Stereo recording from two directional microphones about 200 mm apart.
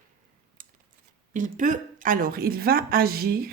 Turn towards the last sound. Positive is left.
turn(degrees=-50)  # may be behind; listen again after turning